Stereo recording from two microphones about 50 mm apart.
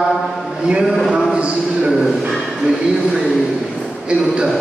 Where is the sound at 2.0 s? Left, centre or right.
Centre.